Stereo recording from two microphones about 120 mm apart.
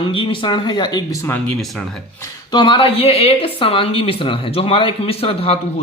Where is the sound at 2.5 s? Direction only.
40° left (ahead or behind).